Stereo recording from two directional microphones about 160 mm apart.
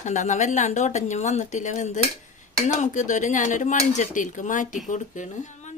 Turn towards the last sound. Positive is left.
turn(degrees=50)  # may be behind; listen again after turning